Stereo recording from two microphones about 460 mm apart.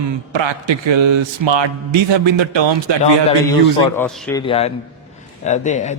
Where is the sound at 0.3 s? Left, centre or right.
Right.